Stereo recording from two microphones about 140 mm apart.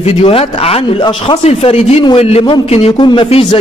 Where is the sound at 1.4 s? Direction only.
50° left (ahead or behind).